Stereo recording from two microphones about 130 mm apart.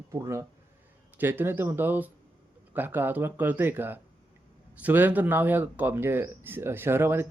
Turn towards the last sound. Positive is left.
turn(degrees=-15)  # may be behind; listen again after turning